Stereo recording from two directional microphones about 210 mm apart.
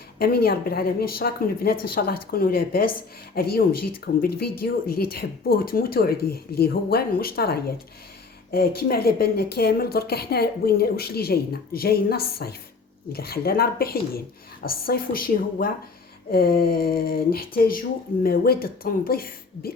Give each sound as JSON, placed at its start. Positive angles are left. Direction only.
{"t": 0.2, "sound": "a woman's voice", "side_deg": 50}